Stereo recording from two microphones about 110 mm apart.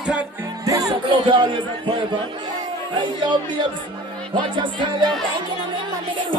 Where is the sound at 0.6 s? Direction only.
30° right (ahead or behind).